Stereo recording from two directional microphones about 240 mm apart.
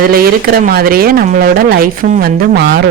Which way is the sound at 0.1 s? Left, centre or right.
Right.